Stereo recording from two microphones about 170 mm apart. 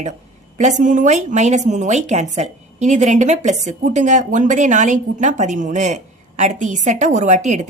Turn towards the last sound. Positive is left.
turn(degrees=-45)  # may be behind; listen again after turning